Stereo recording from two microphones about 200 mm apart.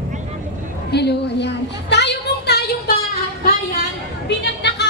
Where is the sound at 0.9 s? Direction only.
55° left (ahead or behind).